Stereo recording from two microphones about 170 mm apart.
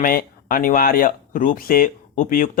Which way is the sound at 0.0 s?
55° left (ahead or behind).